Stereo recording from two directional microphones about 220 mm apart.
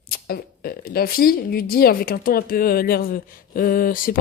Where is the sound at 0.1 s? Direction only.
45° left (ahead or behind).